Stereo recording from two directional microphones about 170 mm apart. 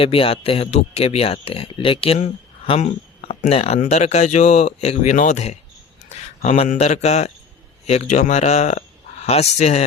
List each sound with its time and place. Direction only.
0.0 s speech: 35° left (ahead or behind)